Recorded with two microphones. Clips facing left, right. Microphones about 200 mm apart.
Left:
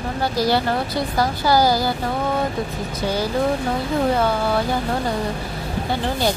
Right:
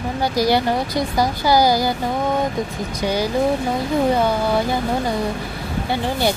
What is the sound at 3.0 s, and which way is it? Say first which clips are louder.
Speech: right 2 dB; 15° right (ahead or behind).